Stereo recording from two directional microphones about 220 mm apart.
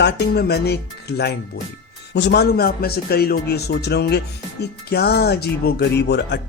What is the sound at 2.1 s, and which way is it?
Speech, 50° left (ahead or behind).